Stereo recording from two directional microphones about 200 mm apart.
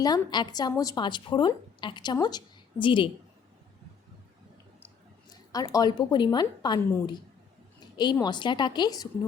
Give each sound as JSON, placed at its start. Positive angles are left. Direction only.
{"t": 0.0, "sound": "a woman's voice", "side_deg": 20}
{"t": 5.3, "sound": "a woman's voice", "side_deg": 20}